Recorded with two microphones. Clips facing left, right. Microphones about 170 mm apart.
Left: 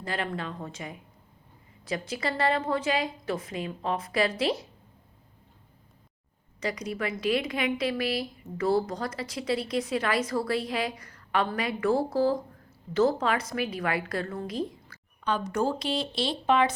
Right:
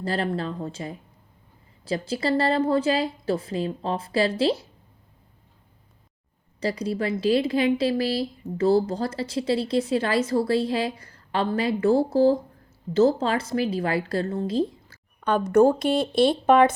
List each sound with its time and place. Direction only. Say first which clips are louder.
0.0 s a woman's voice: right 6 dB; 35° right (ahead or behind)
6.6 s speech: right 5 dB; 30° right (ahead or behind)
15.2 s speech: right 10 dB; 50° right (ahead or behind)